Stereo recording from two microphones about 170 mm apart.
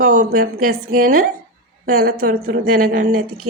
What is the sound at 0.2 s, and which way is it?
A woman's voice, 65° right (ahead or behind).